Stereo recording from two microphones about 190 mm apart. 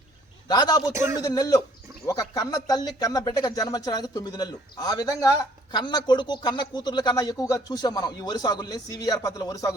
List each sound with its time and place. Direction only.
0.4 s speech: 20° left (ahead or behind)
0.8 s speech: 10° right (ahead or behind)
1.2 s speech: 20° left (ahead or behind)